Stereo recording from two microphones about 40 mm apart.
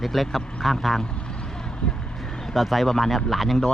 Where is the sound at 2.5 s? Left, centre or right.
Centre.